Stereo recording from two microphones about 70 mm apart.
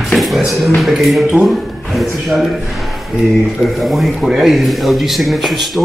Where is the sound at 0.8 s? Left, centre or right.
Centre.